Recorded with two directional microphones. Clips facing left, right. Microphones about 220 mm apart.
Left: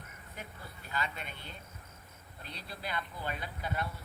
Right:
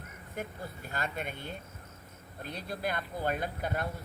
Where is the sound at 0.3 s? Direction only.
50° right (ahead or behind).